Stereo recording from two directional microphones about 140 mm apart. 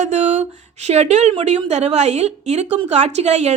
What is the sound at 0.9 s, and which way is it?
A woman's voice, 50° right (ahead or behind).